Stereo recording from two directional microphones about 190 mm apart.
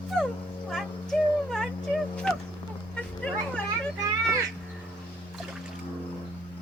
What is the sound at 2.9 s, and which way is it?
Vehicle, 5° left (ahead or behind).